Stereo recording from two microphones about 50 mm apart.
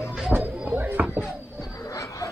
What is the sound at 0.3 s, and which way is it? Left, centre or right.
Music, right.